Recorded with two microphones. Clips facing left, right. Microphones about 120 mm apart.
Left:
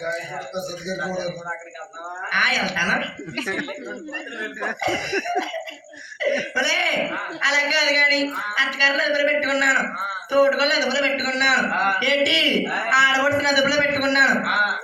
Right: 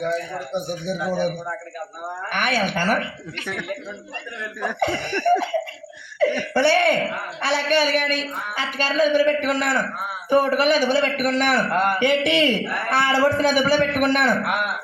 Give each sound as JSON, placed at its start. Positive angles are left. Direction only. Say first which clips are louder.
{"t": 0.0, "sound": "speech", "louder": "right 3 dB", "side_deg": -50}
{"t": 2.3, "sound": "speech", "louder": "right 2 dB", "side_deg": -50}
{"t": 3.4, "sound": "speech", "louder": "left 2 dB", "side_deg": 0}
{"t": 4.8, "sound": "speech", "louder": "right 2 dB", "side_deg": -55}